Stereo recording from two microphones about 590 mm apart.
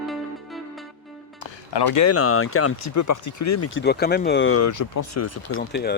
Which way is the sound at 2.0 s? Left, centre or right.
Left.